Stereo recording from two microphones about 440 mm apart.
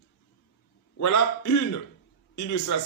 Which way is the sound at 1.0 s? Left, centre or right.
Left.